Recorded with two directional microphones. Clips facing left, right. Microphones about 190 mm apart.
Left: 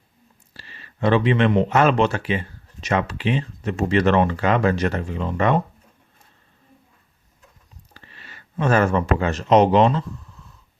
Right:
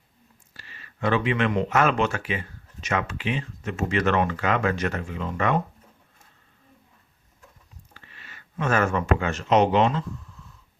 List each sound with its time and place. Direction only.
0.5 s speech: 30° left (ahead or behind)
7.9 s speech: 35° left (ahead or behind)